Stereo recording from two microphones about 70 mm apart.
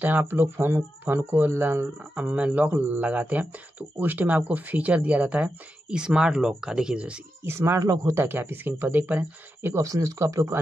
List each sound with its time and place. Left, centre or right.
0.0 s speech: right
2.1 s speech: centre
7.4 s speech: right
8.1 s speech: right
9.8 s speech: right